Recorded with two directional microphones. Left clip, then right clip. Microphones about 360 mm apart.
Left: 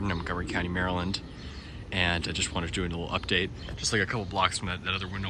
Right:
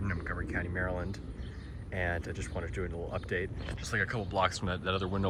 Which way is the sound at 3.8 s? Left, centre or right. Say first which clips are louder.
Left 5 dB; centre.